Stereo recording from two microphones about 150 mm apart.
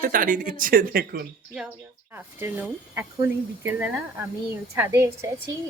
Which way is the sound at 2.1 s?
15° right (ahead or behind).